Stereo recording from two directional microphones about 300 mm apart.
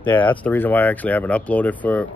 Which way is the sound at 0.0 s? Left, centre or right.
Centre.